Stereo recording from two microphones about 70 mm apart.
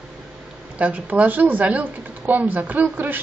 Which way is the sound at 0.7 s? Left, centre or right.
Right.